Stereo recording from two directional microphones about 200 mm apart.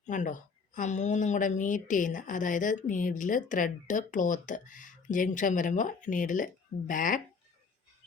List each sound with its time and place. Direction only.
0.1 s speech: 40° left (ahead or behind)